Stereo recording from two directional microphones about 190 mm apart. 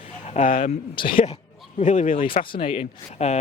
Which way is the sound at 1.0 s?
25° left (ahead or behind).